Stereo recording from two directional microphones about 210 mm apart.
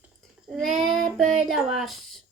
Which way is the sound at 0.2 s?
Centre (ahead or behind).